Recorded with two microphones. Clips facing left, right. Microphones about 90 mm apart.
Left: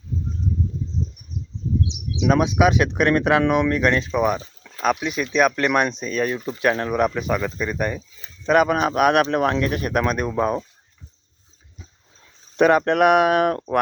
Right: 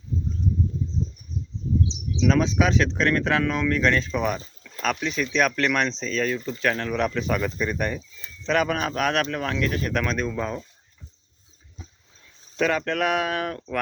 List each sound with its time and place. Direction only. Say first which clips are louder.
1.9 s bird: even; 60° left (ahead or behind)
2.2 s speech: left 3 dB; 15° left (ahead or behind); by 9.8 s 30° left (ahead or behind)
9.8 s speech: left 4 dB; 20° left (ahead or behind)
12.5 s speech: left 8 dB; 25° left (ahead or behind)